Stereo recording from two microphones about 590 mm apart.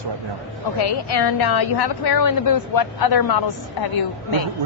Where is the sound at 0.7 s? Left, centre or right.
Left.